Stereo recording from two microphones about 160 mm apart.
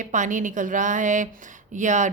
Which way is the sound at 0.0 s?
50° right (ahead or behind).